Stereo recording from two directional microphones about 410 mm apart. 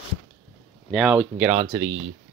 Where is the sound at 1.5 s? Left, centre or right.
Centre.